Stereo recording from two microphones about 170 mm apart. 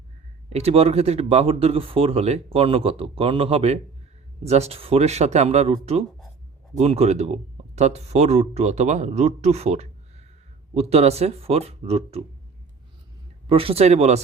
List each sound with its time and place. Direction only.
0.5 s speech: 40° right (ahead or behind)
13.5 s speech: 35° right (ahead or behind)